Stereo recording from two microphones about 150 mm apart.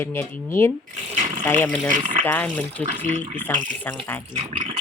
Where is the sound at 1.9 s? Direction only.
60° right (ahead or behind).